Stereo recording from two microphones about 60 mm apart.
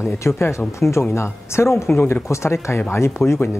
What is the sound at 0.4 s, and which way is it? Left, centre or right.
Speech, left.